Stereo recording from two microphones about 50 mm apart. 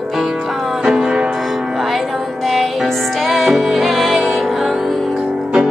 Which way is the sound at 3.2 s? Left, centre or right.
Centre.